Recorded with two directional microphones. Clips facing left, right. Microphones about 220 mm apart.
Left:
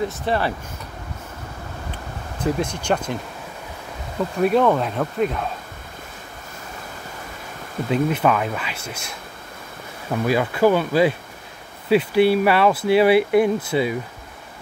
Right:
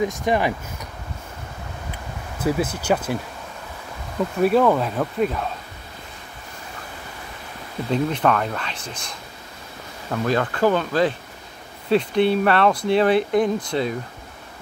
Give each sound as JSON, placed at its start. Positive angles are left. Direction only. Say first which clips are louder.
{"t": 0.0, "sound": "speech", "louder": "right 2 dB", "side_deg": -15}
{"t": 2.3, "sound": "speech", "louder": "right 1 dB", "side_deg": -5}
{"t": 4.4, "sound": "speech", "louder": "even", "side_deg": 0}
{"t": 7.9, "sound": "speech", "louder": "left 1 dB", "side_deg": 5}
{"t": 10.2, "sound": "speech", "louder": "left 2 dB", "side_deg": 10}